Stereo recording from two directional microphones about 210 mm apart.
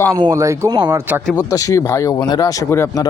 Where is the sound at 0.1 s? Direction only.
15° right (ahead or behind).